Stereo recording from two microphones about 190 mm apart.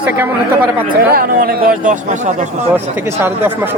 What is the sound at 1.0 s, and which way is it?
Speech, 50° right (ahead or behind).